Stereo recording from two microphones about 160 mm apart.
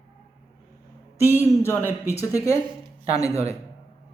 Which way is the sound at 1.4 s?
15° left (ahead or behind).